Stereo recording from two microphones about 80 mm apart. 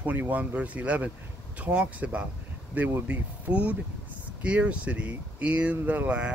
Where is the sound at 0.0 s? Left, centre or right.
Right.